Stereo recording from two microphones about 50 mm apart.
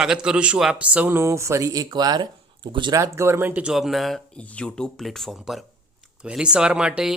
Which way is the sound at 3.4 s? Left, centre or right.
Right.